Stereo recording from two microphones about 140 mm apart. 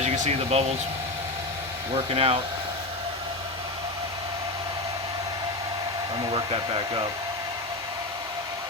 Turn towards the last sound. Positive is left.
turn(degrees=-35)  # may be behind; listen again after turning